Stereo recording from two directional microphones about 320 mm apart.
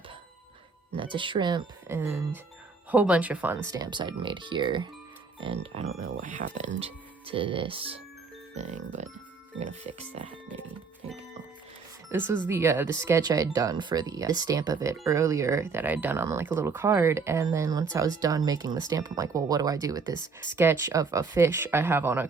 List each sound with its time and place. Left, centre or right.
0.9 s speech: centre
6.1 s speech: right
9.5 s speech: right
10.2 s speech: centre
12.0 s speech: centre